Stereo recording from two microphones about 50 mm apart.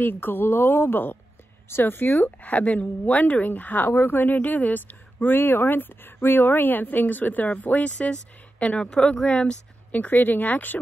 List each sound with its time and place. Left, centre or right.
0.0 s a woman's voice: left
2.5 s speech: left
9.8 s speech: left